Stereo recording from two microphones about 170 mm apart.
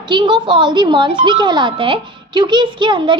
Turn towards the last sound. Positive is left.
turn(degrees=-30)  # may be behind; listen again after turning